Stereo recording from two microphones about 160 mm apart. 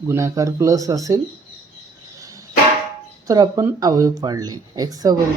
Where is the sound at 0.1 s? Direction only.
20° right (ahead or behind).